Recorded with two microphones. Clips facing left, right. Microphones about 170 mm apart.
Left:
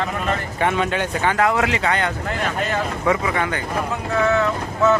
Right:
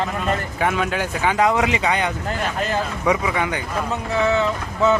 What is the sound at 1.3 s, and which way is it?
Speech, 20° right (ahead or behind).